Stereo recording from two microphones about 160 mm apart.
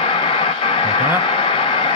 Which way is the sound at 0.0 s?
30° left (ahead or behind).